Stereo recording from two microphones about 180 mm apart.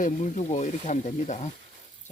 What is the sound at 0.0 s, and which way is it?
Speech, 40° left (ahead or behind).